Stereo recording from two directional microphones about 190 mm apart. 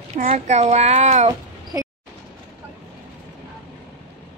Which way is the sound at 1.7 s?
15° right (ahead or behind).